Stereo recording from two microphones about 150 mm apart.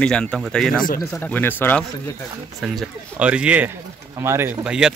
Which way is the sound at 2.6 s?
Centre (ahead or behind).